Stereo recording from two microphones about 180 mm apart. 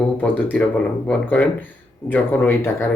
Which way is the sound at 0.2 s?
10° left (ahead or behind).